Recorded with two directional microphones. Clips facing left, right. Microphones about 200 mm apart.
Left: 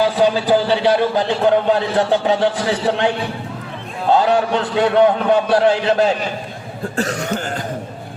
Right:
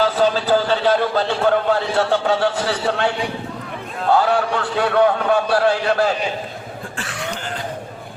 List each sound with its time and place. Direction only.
0.0 s a man's voice: 15° left (ahead or behind)
4.1 s a man's voice: 20° left (ahead or behind)
6.9 s cough: 40° left (ahead or behind)